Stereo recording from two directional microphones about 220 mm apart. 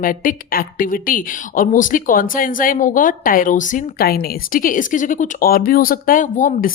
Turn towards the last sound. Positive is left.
turn(degrees=35)  # may be behind; listen again after turning